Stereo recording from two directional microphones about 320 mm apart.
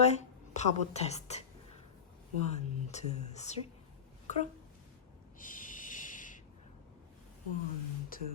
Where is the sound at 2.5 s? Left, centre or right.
Left.